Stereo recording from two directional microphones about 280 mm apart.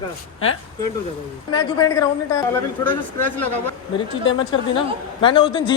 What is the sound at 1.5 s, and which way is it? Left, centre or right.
Speech, centre.